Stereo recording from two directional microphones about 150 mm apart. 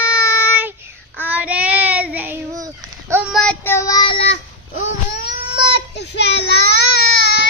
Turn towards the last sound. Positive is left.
turn(degrees=90)